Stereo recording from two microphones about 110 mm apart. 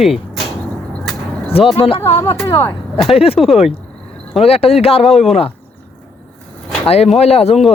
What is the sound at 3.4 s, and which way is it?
Speech, centre (ahead or behind).